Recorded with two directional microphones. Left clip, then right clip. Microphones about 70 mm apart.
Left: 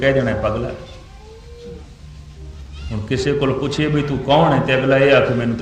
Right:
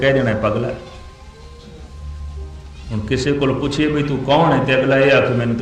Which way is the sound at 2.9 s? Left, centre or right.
Left.